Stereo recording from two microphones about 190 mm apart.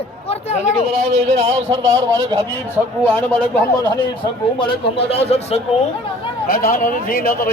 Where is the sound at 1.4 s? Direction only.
35° right (ahead or behind).